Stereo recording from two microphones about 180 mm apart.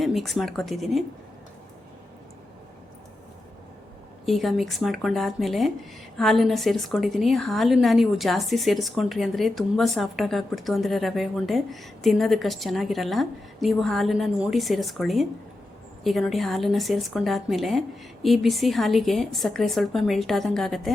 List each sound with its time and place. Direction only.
0.0 s a woman's voice: centre (ahead or behind)
4.3 s a woman's voice: centre (ahead or behind)